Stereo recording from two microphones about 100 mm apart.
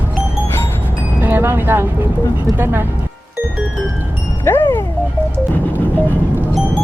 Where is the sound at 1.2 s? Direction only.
20° right (ahead or behind).